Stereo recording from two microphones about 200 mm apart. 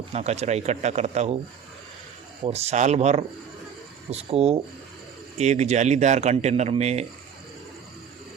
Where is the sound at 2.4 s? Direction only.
30° right (ahead or behind).